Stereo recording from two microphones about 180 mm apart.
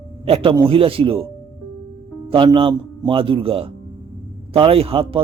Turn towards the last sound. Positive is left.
turn(degrees=-30)  # may be behind; listen again after turning